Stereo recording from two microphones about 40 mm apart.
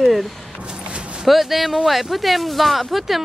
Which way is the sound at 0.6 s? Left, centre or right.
Right.